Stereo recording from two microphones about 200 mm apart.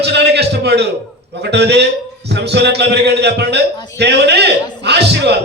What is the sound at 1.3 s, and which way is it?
A man's voice, 55° right (ahead or behind).